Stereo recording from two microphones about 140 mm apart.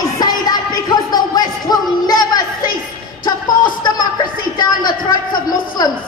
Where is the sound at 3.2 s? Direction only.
30° left (ahead or behind).